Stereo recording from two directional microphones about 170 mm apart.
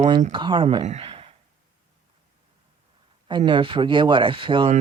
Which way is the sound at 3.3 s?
30° right (ahead or behind).